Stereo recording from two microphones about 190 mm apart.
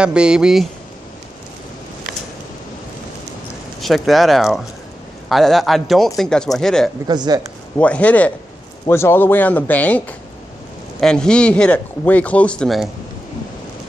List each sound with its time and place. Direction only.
0.0 s speech: 5° right (ahead or behind)
3.8 s speech: centre (ahead or behind)
7.1 s speech: 20° right (ahead or behind)
7.7 s a man's voice: 5° left (ahead or behind)